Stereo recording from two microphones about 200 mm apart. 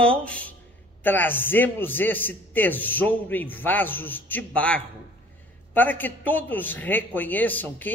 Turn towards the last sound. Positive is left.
turn(degrees=10)  # may be behind; listen again after turning